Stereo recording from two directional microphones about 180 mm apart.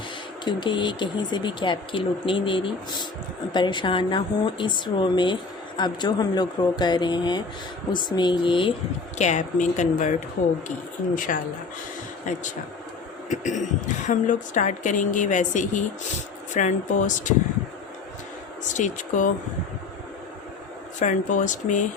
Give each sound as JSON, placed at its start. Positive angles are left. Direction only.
{"t": 0.4, "sound": "speech", "side_deg": 25}
{"t": 9.1, "sound": "a woman's voice", "side_deg": 40}
{"t": 18.7, "sound": "a woman's voice", "side_deg": 45}
{"t": 21.0, "sound": "a woman's voice", "side_deg": 45}